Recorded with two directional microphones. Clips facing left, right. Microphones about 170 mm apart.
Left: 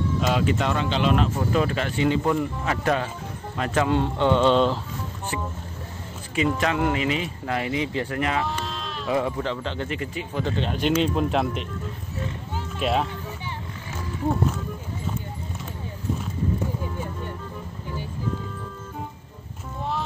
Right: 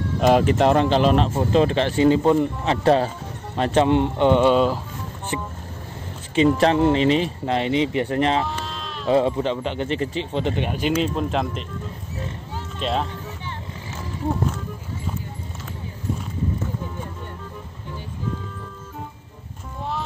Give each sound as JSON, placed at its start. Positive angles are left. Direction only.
{"t": 0.2, "sound": "speech", "side_deg": -50}
{"t": 5.3, "sound": "speech", "side_deg": -25}
{"t": 8.5, "sound": "bleat", "side_deg": 0}
{"t": 9.0, "sound": "speech", "side_deg": -25}
{"t": 9.8, "sound": "speech", "side_deg": -30}
{"t": 12.7, "sound": "speech", "side_deg": 5}